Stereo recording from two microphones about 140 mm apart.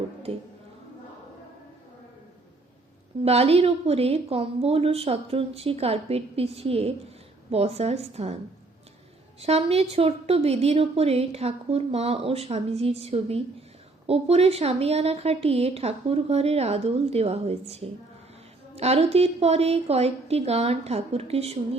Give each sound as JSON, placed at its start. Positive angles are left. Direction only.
{"t": 0.3, "sound": "a woman's voice", "side_deg": -45}
{"t": 3.2, "sound": "a woman's voice", "side_deg": -45}
{"t": 9.4, "sound": "a woman's voice", "side_deg": -45}